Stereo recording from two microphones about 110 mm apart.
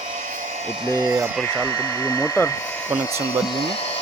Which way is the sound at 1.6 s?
20° left (ahead or behind).